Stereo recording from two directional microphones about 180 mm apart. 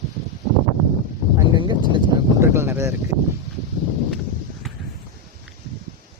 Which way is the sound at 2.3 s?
15° right (ahead or behind).